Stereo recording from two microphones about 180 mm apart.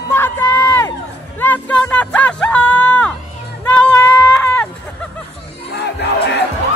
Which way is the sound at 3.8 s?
10° left (ahead or behind).